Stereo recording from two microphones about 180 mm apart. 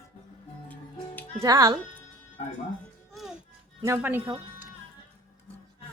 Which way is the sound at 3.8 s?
10° right (ahead or behind).